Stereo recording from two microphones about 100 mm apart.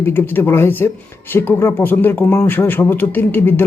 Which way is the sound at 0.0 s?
20° left (ahead or behind).